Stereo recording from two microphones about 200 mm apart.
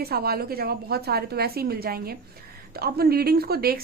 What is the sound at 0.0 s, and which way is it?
A woman's voice, 50° right (ahead or behind).